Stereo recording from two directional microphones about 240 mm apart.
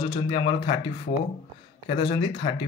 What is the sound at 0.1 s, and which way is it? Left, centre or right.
Speech, left.